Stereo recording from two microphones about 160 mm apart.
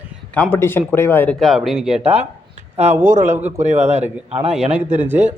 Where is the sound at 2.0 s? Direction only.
40° right (ahead or behind).